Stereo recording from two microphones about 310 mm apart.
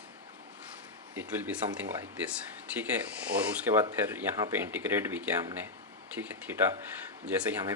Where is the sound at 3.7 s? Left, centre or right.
Centre.